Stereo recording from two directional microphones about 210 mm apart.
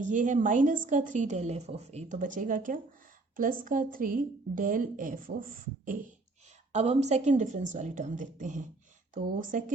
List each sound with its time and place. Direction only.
0.0 s a woman's voice: 35° right (ahead or behind)